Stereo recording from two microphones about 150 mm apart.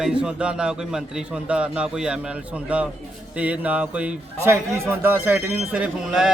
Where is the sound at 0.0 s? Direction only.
5° right (ahead or behind).